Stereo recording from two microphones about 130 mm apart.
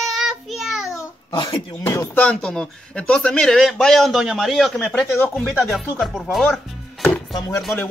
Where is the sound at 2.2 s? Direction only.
10° left (ahead or behind).